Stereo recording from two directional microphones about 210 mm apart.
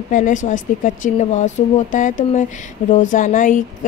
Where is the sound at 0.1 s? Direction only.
35° left (ahead or behind).